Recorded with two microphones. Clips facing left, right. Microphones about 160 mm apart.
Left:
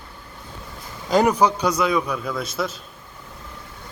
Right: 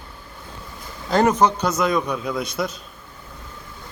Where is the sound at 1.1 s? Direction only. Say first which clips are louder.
Even; 10° left (ahead or behind).